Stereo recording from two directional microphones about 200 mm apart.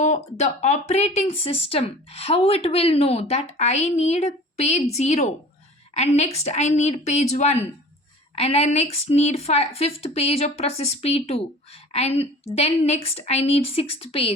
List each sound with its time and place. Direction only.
0.0 s a woman's voice: 35° left (ahead or behind)